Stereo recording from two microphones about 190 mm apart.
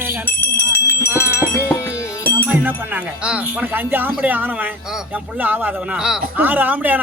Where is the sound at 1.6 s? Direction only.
15° left (ahead or behind).